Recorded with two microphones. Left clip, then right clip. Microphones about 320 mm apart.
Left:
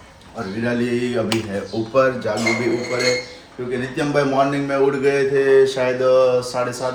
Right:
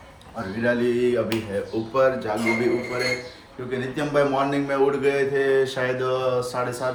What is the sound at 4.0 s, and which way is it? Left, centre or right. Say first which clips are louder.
Speech: left 4 dB; centre.